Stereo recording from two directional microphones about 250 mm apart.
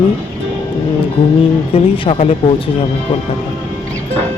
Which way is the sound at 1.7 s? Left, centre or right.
Left.